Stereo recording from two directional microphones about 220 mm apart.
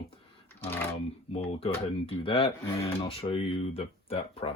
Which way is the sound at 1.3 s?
25° left (ahead or behind).